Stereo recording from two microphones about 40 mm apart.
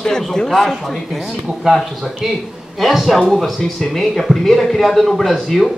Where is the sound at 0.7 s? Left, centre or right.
Centre.